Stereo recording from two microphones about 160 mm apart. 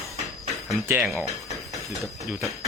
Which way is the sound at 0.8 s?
10° right (ahead or behind).